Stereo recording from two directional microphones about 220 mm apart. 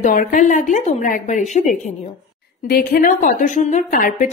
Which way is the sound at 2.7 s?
40° left (ahead or behind).